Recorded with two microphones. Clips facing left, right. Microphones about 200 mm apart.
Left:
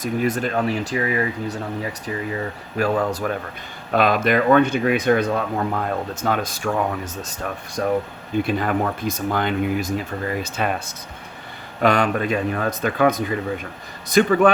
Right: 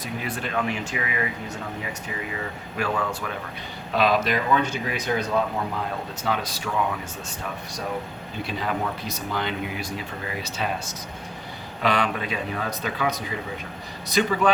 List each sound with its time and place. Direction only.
0.0 s speech: 45° left (ahead or behind)
3.9 s speech: 50° left (ahead or behind)